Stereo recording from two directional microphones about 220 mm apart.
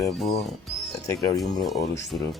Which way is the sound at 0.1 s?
Centre (ahead or behind).